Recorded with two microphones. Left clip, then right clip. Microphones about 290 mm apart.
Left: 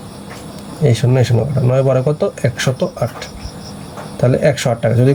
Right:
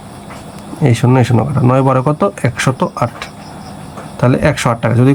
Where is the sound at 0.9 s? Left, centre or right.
Centre.